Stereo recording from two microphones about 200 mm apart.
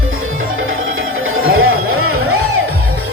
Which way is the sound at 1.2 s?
90° right.